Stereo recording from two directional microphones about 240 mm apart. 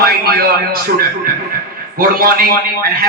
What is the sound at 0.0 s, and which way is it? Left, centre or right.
A man's voice, right.